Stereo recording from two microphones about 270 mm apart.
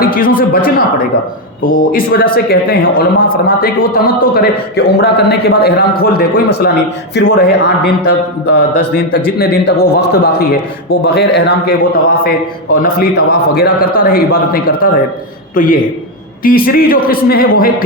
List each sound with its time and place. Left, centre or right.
0.0 s speech: left
12.7 s speech: left